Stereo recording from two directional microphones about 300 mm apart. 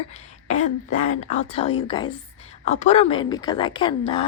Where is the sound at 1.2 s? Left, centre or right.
Left.